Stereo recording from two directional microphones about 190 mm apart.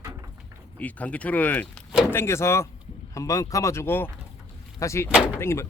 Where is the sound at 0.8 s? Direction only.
10° left (ahead or behind).